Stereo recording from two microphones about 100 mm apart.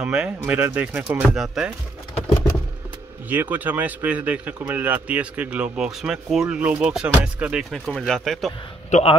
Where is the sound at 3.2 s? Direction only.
20° right (ahead or behind).